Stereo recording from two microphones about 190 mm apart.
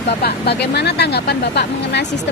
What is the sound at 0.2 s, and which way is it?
Speech, 60° left (ahead or behind).